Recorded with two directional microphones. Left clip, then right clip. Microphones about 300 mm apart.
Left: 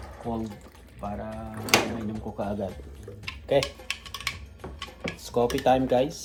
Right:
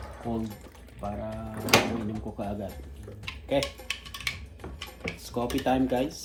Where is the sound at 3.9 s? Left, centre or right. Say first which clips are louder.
Left 1 dB; centre.